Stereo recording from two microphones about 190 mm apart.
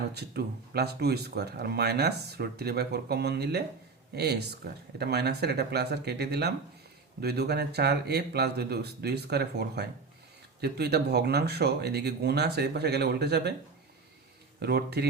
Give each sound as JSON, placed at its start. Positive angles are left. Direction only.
{"t": 0.1, "sound": "speech", "side_deg": -60}
{"t": 14.6, "sound": "speech", "side_deg": -60}